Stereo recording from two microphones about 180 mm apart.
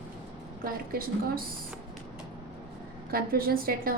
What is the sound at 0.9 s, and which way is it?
Speech, 55° right (ahead or behind).